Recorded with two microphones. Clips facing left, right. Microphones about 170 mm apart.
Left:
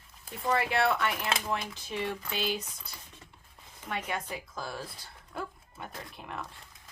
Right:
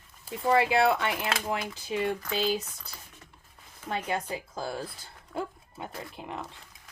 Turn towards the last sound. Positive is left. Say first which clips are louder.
# right 3 dB
turn(degrees=-25)  # may be behind; listen again after turning